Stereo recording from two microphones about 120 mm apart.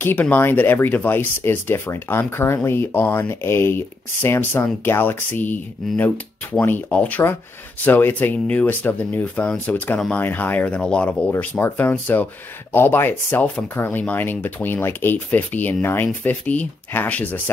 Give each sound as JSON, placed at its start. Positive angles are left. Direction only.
{"t": 0.0, "sound": "speech", "side_deg": 15}